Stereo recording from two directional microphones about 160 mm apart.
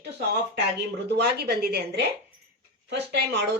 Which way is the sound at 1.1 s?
90° right.